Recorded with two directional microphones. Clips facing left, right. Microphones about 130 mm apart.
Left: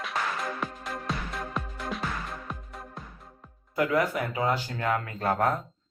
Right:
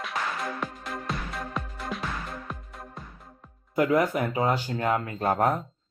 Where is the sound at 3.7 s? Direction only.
25° right (ahead or behind).